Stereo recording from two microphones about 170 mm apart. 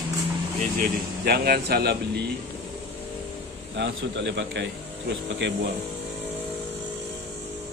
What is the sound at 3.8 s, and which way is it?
A man's voice, 90° right.